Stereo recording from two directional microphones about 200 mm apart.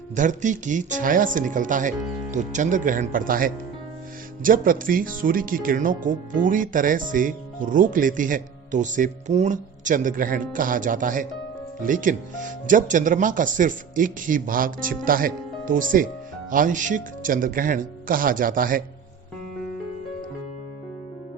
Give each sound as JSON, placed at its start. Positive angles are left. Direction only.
{"t": 0.2, "sound": "speech", "side_deg": -40}